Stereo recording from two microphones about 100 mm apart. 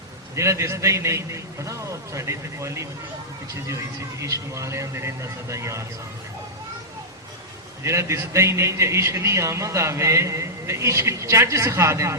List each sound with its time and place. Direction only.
0.3 s a man's voice: 30° right (ahead or behind)
4.2 s speech: 30° right (ahead or behind)
7.9 s a man's voice: 30° right (ahead or behind)